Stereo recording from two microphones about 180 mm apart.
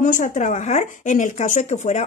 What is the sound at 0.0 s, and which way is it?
Speech, 45° left (ahead or behind).